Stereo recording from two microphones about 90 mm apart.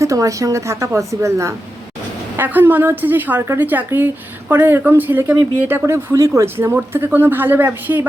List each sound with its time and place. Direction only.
0.0 s speech: 35° right (ahead or behind)
2.3 s a woman's voice: 25° right (ahead or behind)